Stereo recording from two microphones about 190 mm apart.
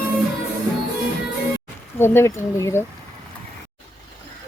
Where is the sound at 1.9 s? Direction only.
10° left (ahead or behind).